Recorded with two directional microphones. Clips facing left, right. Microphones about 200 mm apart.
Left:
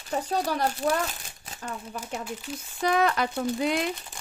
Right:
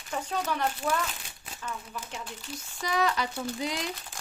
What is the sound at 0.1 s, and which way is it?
Speech, 35° left (ahead or behind).